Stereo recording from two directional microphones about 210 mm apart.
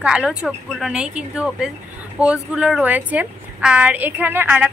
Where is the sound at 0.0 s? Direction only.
5° right (ahead or behind).